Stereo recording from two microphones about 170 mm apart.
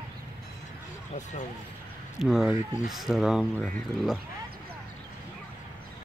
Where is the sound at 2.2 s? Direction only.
5° right (ahead or behind).